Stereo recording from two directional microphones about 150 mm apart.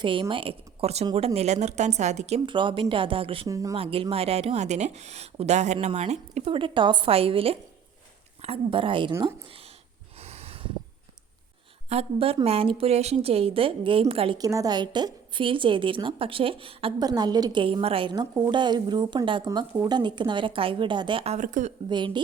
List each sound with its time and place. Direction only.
0.0 s a woman's voice: 35° right (ahead or behind)
2.5 s a woman's voice: 35° right (ahead or behind)
3.4 s speech: 25° right (ahead or behind)
3.8 s a woman's voice: 40° right (ahead or behind)
10.2 s snort: 45° right (ahead or behind)
11.9 s a woman's voice: 40° right (ahead or behind)
14.3 s a woman's voice: 25° right (ahead or behind)
19.5 s a woman's voice: 20° right (ahead or behind)
21.3 s a woman's voice: 55° right (ahead or behind)
21.8 s a woman's voice: 30° right (ahead or behind)